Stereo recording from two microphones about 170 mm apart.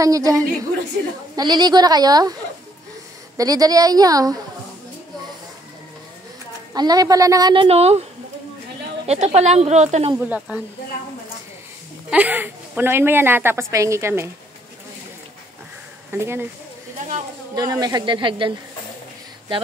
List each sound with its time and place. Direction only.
0.0 s a woman's voice: 20° right (ahead or behind)
3.3 s a woman's voice: 20° right (ahead or behind)
6.7 s a woman's voice: 20° right (ahead or behind)
7.6 s a woman's voice: 35° right (ahead or behind)
9.0 s a woman's voice: 40° right (ahead or behind)
10.1 s a woman's voice: 5° right (ahead or behind)
12.1 s a woman's voice: 10° right (ahead or behind)
16.1 s a woman's voice: 15° right (ahead or behind)
17.6 s a woman's voice: 25° right (ahead or behind)